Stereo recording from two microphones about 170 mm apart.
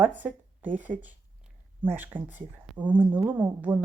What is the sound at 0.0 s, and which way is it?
A woman's voice, 10° right (ahead or behind).